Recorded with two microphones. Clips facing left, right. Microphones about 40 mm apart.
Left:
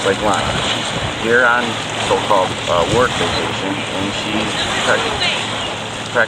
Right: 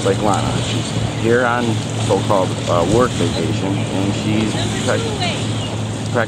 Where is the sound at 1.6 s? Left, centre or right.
Left.